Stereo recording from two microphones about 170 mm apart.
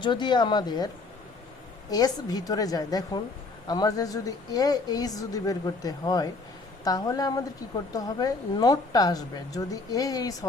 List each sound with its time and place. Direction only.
0.0 s a woman's voice: 25° left (ahead or behind)
1.9 s a woman's voice: 20° left (ahead or behind)